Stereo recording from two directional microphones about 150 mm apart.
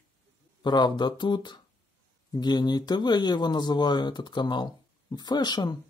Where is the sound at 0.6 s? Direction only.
30° left (ahead or behind).